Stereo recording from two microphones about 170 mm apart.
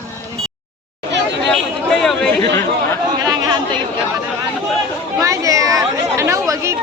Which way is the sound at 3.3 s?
25° right (ahead or behind).